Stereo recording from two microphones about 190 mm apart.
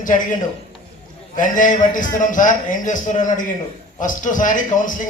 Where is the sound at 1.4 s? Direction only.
45° left (ahead or behind).